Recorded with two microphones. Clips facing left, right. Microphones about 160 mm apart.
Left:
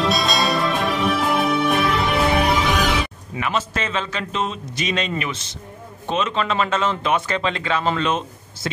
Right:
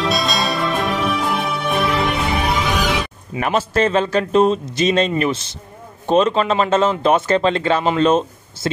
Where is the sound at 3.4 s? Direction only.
40° right (ahead or behind).